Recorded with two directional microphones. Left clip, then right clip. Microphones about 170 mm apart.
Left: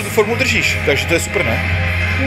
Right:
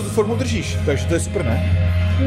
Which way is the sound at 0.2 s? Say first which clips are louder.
Left 7 dB; 5° right (ahead or behind).